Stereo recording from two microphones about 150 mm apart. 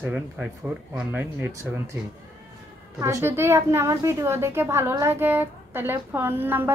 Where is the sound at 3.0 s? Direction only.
20° right (ahead or behind).